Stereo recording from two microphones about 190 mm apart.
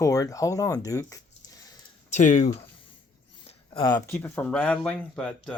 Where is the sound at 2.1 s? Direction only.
40° left (ahead or behind).